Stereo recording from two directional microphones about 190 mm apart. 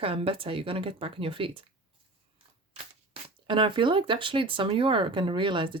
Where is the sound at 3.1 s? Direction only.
25° right (ahead or behind).